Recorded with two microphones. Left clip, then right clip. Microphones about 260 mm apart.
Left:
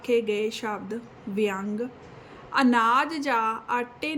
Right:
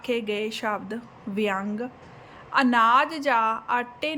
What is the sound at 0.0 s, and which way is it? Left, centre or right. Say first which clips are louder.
A woman's voice: left 3 dB; centre.